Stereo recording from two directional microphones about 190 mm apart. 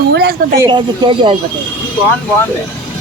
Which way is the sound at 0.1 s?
60° right (ahead or behind).